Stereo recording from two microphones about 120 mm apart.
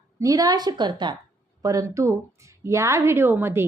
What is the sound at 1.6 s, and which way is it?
A woman's voice, 25° right (ahead or behind).